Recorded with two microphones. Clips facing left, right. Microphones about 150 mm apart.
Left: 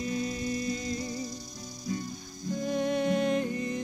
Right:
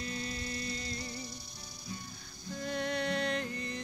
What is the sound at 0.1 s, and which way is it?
Music, 30° right (ahead or behind).